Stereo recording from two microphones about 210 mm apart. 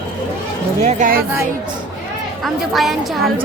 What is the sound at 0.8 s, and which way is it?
Speech, 40° right (ahead or behind).